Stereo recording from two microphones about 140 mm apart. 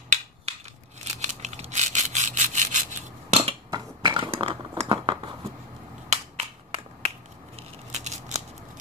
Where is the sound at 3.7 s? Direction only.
30° right (ahead or behind).